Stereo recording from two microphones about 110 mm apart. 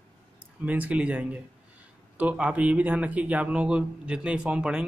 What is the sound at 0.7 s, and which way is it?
Speech, 15° right (ahead or behind).